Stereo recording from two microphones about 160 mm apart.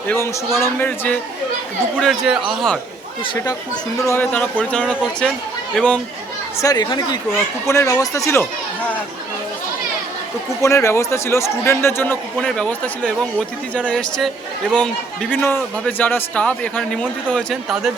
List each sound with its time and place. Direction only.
0.6 s a man's voice: 10° left (ahead or behind)
4.0 s a man's voice: 15° left (ahead or behind)
6.6 s speech: 25° left (ahead or behind)
10.6 s a man's voice: 15° left (ahead or behind); by 17.9 s centre (ahead or behind)